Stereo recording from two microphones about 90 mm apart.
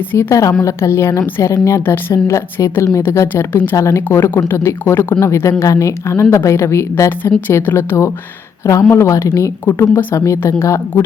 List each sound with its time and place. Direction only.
0.1 s a woman's voice: 30° left (ahead or behind)
9.6 s speech: 20° left (ahead or behind)
10.2 s a woman's voice: 35° left (ahead or behind)